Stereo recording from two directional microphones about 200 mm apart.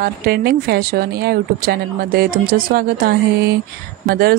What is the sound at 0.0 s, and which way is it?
A woman's voice, 50° right (ahead or behind).